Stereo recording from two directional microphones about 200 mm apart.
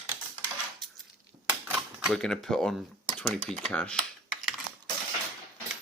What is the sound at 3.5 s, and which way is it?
Speech, 5° left (ahead or behind).